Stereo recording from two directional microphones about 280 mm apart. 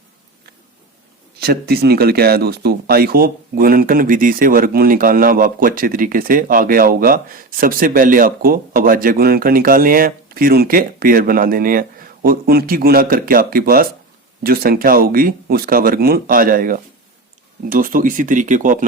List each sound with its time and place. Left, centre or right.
1.4 s speech: right